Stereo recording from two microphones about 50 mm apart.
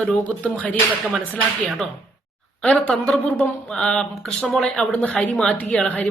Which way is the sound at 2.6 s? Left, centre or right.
Centre.